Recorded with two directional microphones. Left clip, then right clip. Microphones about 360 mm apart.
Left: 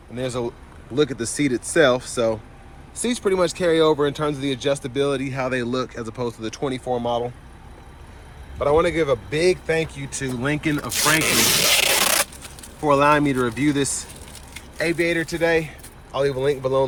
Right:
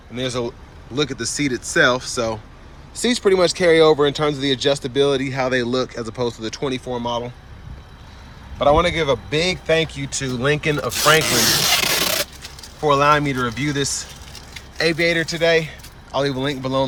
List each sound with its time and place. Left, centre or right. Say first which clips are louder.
0.1 s speech: right 2 dB; centre
8.5 s speech: right 3 dB; centre
12.8 s speech: right 1 dB; centre